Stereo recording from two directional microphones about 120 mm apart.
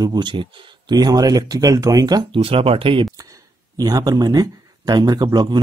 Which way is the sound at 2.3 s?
50° right (ahead or behind).